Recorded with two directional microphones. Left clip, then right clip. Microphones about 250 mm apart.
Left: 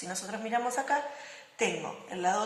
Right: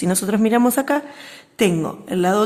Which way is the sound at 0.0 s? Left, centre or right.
Right.